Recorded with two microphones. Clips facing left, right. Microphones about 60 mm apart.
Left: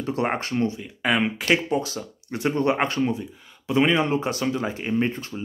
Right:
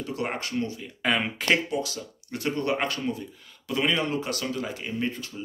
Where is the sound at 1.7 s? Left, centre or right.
Left.